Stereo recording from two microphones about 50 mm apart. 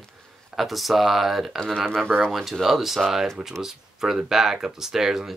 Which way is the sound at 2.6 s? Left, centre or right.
Centre.